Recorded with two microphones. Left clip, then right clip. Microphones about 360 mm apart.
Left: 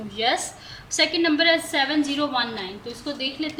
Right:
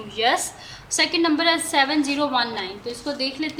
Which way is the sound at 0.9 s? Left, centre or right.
Centre.